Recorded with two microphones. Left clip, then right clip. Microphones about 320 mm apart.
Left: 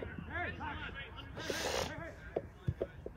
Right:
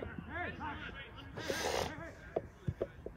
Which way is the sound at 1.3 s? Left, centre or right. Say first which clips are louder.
Right 1 dB; right.